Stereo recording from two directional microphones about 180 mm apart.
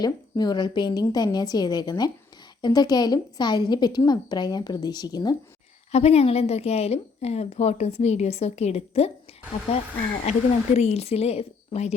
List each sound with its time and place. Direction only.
0.0 s a woman's voice: 20° left (ahead or behind)
5.9 s a woman's voice: 35° left (ahead or behind)
10.3 s a woman's voice: 35° left (ahead or behind)